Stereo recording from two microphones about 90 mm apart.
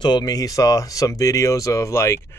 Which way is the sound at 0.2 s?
40° left (ahead or behind).